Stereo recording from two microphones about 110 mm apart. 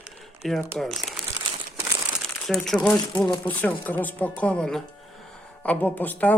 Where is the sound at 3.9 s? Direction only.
15° left (ahead or behind).